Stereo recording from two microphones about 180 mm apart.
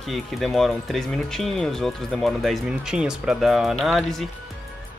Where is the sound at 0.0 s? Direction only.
Centre (ahead or behind).